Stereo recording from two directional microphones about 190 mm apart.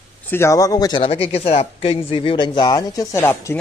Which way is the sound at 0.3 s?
15° left (ahead or behind).